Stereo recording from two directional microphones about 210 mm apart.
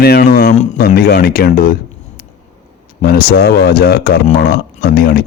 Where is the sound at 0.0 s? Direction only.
45° left (ahead or behind).